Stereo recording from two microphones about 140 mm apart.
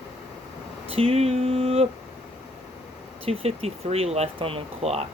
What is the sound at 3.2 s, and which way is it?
Speech, 45° right (ahead or behind).